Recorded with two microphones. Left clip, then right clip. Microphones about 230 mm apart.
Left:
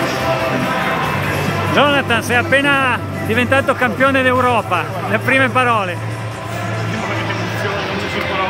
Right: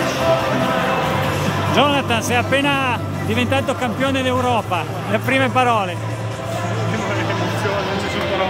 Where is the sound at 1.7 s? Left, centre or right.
Centre.